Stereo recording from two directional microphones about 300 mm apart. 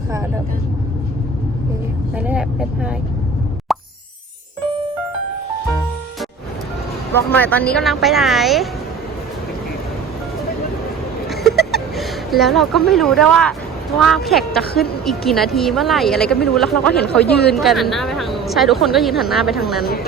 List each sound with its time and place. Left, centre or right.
2.1 s speech: centre
3.7 s plop: centre
7.1 s speech: centre
11.7 s music: centre
12.9 s speech: centre
17.2 s a woman's voice: left
17.5 s speech: centre